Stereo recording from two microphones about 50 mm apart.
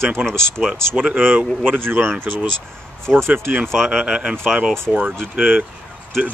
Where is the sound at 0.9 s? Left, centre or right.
Right.